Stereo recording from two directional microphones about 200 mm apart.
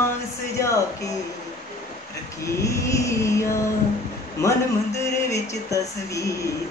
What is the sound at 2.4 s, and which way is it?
Speech, 15° left (ahead or behind).